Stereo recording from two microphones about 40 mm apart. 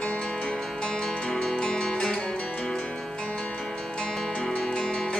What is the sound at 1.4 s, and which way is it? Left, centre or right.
Music, centre.